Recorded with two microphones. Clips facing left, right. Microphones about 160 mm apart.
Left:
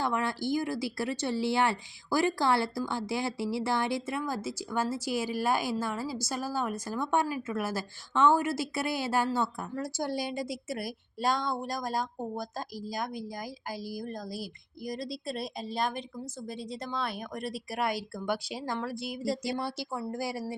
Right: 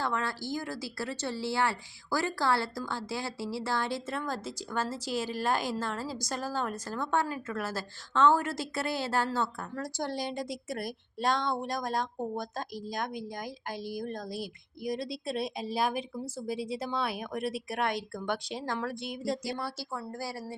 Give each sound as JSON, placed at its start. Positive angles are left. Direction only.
{"t": 0.0, "sound": "speech", "side_deg": 15}
{"t": 19.5, "sound": "speech", "side_deg": 20}